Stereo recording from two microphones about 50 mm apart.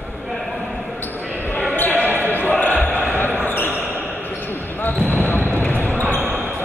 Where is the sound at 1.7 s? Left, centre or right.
Left.